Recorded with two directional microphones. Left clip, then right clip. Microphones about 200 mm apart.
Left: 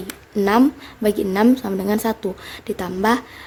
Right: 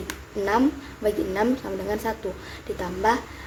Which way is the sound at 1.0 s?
45° left (ahead or behind).